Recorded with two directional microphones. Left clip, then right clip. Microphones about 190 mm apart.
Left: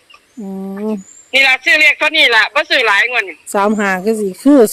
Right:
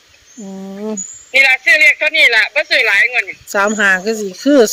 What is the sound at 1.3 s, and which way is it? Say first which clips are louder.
Speech: right 1 dB; 35° left (ahead or behind).